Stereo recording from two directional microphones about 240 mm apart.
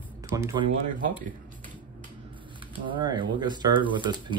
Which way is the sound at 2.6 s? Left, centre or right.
Centre.